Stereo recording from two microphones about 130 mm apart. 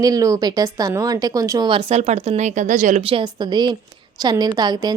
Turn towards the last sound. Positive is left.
turn(degrees=-30)  # may be behind; listen again after turning